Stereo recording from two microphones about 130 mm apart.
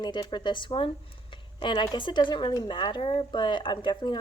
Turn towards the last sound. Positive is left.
turn(degrees=35)  # may be behind; listen again after turning